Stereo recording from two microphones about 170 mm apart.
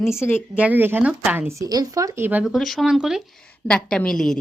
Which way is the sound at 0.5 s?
10° right (ahead or behind).